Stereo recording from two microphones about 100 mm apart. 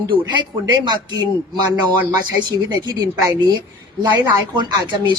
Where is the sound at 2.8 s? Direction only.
40° right (ahead or behind).